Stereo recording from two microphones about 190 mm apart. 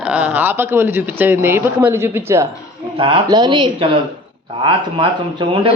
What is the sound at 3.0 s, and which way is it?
A woman's voice, 30° right (ahead or behind).